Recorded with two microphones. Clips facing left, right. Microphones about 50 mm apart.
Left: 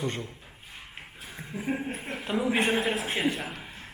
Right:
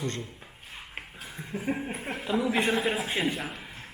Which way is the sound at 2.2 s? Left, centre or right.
Left.